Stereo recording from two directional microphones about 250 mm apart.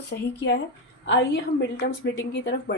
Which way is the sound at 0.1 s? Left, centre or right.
Left.